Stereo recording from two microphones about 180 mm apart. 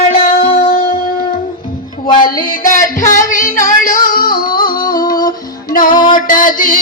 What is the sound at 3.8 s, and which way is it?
Music, 50° left (ahead or behind).